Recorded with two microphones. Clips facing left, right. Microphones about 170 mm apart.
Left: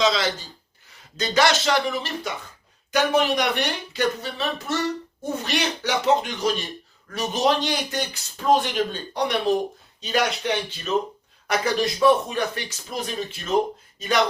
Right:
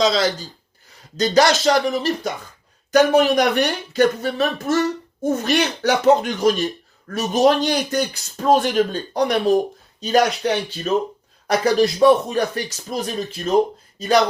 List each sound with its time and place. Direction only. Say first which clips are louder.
0.0 s speech: right 4 dB; 40° right (ahead or behind)